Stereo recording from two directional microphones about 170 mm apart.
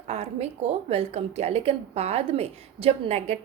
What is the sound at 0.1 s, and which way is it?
A woman's voice, 40° right (ahead or behind).